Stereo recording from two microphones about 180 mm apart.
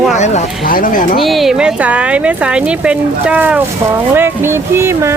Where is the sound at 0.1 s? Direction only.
40° left (ahead or behind).